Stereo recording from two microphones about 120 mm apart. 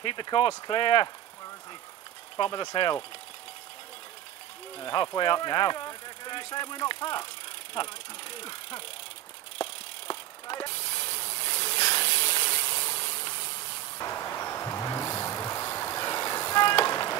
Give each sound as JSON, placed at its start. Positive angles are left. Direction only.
{"t": 0.0, "sound": "speech", "side_deg": 40}
{"t": 2.3, "sound": "speech", "side_deg": 40}
{"t": 4.7, "sound": "speech", "side_deg": 40}
{"t": 9.6, "sound": "vehicle", "side_deg": 40}
{"t": 12.3, "sound": "hiss", "side_deg": 45}